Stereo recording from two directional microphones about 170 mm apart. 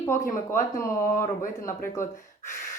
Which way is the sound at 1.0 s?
50° left (ahead or behind).